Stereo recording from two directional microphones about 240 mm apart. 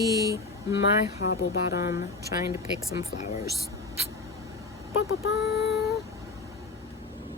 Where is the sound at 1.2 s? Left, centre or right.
Left.